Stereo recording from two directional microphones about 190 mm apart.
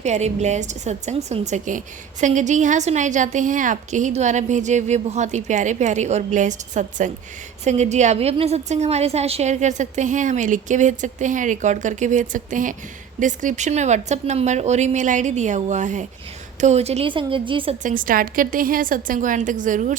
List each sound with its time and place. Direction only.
0.0 s a woman's voice: 35° right (ahead or behind)
17.8 s a woman's voice: 45° right (ahead or behind)